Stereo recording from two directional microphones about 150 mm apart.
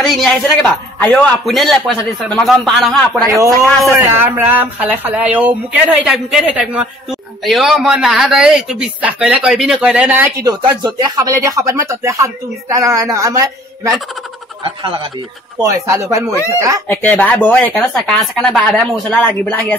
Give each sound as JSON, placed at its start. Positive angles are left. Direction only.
{"t": 0.0, "sound": "a man's voice", "side_deg": 0}
{"t": 3.9, "sound": "speech", "side_deg": -15}
{"t": 10.4, "sound": "speech", "side_deg": -25}
{"t": 14.6, "sound": "speech", "side_deg": -35}
{"t": 15.6, "sound": "speech", "side_deg": -20}
{"t": 16.8, "sound": "speech", "side_deg": 10}